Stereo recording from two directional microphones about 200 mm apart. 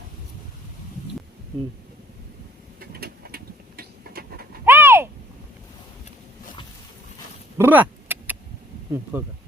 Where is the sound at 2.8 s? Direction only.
50° right (ahead or behind).